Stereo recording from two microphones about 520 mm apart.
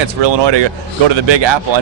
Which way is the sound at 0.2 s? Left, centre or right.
Right.